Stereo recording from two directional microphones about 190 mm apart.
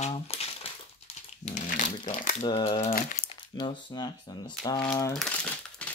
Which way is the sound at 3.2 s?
25° left (ahead or behind).